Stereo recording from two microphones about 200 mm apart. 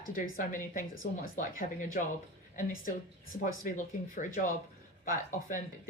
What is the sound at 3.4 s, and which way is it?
A woman's voice, 40° left (ahead or behind).